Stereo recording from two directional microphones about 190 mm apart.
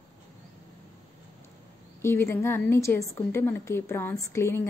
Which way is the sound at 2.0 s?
15° left (ahead or behind).